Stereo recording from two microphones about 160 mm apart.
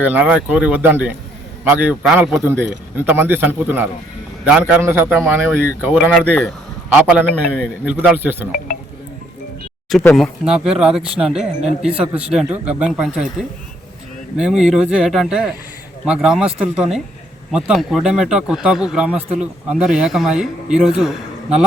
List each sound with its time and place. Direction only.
0.0 s a man's voice: 10° right (ahead or behind)
6.1 s speech: 10° left (ahead or behind)
6.9 s a man's voice: 10° right (ahead or behind)
10.2 s a man's voice: 5° right (ahead or behind)
14.3 s a man's voice: 5° right (ahead or behind)